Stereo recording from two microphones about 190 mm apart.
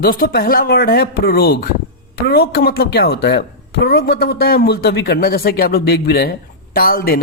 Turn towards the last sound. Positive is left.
turn(degrees=50)  # may be behind; listen again after turning